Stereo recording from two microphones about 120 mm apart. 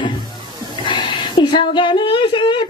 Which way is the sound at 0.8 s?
45° left (ahead or behind).